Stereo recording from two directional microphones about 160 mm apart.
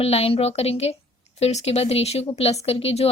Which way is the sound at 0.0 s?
40° left (ahead or behind).